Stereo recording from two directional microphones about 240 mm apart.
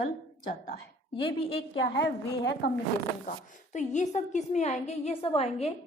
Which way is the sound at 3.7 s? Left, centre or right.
Left.